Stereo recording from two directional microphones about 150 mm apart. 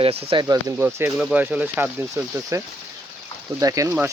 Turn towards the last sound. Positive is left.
turn(degrees=-20)  # may be behind; listen again after turning